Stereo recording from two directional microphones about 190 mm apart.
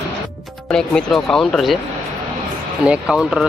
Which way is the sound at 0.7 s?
5° left (ahead or behind).